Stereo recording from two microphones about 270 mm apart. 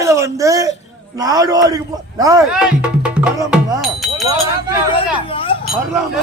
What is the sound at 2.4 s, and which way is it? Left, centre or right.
Music, centre.